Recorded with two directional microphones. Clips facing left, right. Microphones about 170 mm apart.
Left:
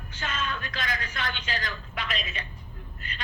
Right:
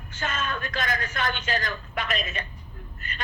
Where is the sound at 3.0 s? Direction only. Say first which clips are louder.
Right 2 dB; 45° right (ahead or behind).